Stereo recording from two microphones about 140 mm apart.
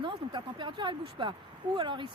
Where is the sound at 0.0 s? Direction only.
35° right (ahead or behind).